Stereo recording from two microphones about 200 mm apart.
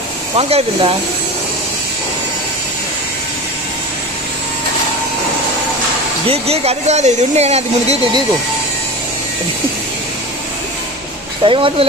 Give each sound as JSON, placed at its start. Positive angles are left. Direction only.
{"t": 0.4, "sound": "speech", "side_deg": -30}
{"t": 6.2, "sound": "speech", "side_deg": -30}
{"t": 11.4, "sound": "speech", "side_deg": -25}